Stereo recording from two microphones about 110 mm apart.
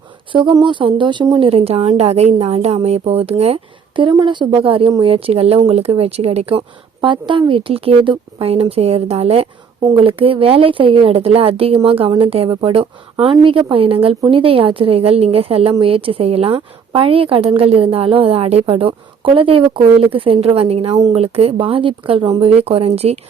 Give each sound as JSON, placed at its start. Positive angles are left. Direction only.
{"t": 0.5, "sound": "speech", "side_deg": -45}
{"t": 1.4, "sound": "a woman's voice", "side_deg": -65}
{"t": 3.9, "sound": "speech", "side_deg": -50}
{"t": 8.7, "sound": "a woman's voice", "side_deg": -70}
{"t": 9.9, "sound": "speech", "side_deg": -55}
{"t": 16.6, "sound": "speech", "side_deg": -55}
{"t": 20.9, "sound": "speech", "side_deg": -35}
{"t": 21.2, "sound": "speech", "side_deg": -65}
{"t": 22.4, "sound": "a woman's voice", "side_deg": -60}